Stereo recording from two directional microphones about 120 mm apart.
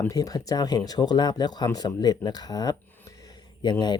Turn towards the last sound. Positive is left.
turn(degrees=40)  # may be behind; listen again after turning